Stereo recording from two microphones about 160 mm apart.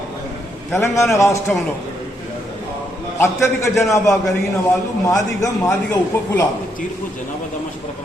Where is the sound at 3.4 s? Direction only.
20° left (ahead or behind).